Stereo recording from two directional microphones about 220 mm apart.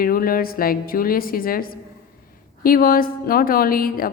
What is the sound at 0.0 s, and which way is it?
Speech, 40° left (ahead or behind).